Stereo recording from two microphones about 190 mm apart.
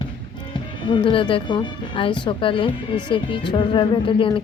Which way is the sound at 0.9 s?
25° left (ahead or behind).